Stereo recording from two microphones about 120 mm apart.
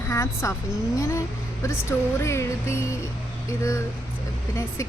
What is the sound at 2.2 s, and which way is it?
Speech, 25° left (ahead or behind).